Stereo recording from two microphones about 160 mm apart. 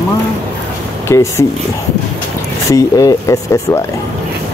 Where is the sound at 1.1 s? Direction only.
20° left (ahead or behind).